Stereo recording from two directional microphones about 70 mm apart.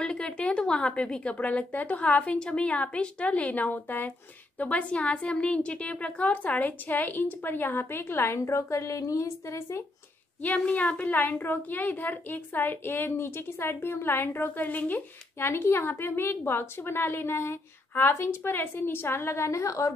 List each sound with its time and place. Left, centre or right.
0.0 s a woman's voice: centre; by 9.8 s left
10.4 s a woman's voice: left